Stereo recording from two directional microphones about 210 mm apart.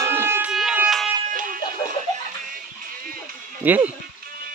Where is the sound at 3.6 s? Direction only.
10° right (ahead or behind).